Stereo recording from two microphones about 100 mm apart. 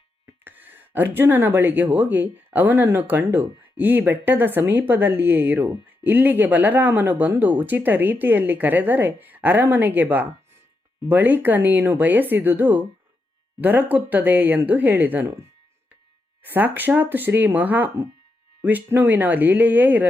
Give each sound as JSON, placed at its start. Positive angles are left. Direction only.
{"t": 0.4, "sound": "speech", "side_deg": -20}